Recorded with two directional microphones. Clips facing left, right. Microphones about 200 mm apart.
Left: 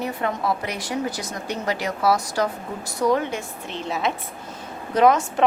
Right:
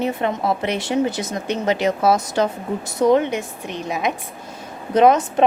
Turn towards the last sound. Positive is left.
turn(degrees=-20)  # may be behind; listen again after turning